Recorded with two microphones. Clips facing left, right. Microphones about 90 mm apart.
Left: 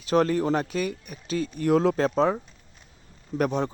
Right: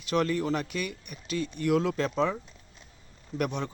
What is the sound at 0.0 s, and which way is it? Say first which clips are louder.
Speech: left 5 dB; 35° left (ahead or behind).